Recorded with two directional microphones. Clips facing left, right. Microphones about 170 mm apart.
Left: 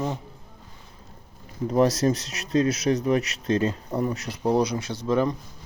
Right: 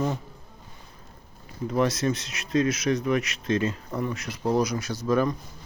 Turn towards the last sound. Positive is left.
turn(degrees=25)  # may be behind; listen again after turning